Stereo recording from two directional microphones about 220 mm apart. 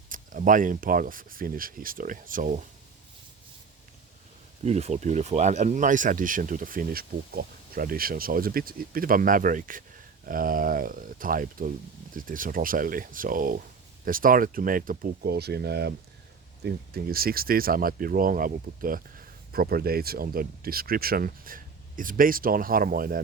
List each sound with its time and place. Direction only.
0.1 s speech: 40° right (ahead or behind)
4.6 s speech: 30° right (ahead or behind)